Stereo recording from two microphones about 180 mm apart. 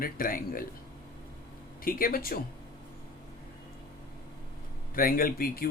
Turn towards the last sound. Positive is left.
turn(degrees=55)  # may be behind; listen again after turning